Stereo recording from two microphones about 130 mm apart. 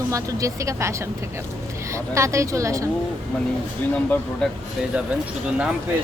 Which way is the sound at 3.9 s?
10° left (ahead or behind).